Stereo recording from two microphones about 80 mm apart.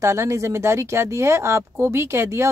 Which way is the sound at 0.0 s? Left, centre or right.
Right.